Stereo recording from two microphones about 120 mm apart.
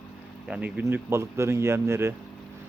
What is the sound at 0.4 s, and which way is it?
Speech, 10° right (ahead or behind).